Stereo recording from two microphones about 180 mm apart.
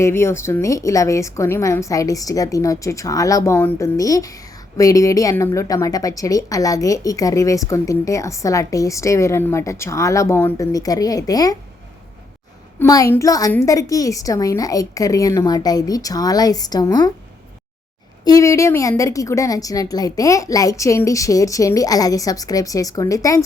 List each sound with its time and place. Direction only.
0.0 s a woman's voice: 15° left (ahead or behind)
12.8 s a woman's voice: 20° left (ahead or behind)
18.3 s a woman's voice: 15° left (ahead or behind)